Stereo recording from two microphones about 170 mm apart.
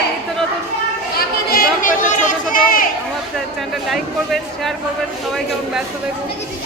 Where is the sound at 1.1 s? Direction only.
60° left (ahead or behind).